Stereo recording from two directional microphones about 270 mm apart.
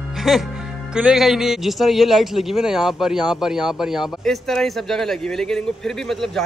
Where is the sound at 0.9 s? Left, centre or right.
Centre.